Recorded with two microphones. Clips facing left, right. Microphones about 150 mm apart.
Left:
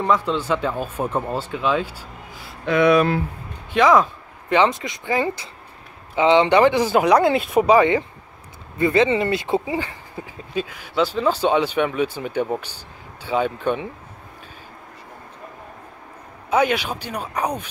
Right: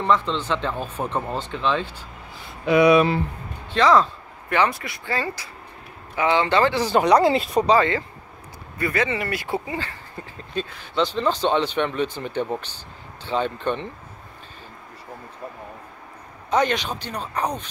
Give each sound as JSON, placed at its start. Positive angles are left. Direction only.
{"t": 0.0, "sound": "speech", "side_deg": 10}
{"t": 2.6, "sound": "speech", "side_deg": -10}
{"t": 3.7, "sound": "speech", "side_deg": 15}
{"t": 16.4, "sound": "speech", "side_deg": 10}